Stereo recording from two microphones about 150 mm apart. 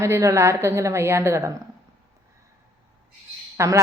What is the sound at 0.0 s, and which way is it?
A woman's voice, 20° right (ahead or behind).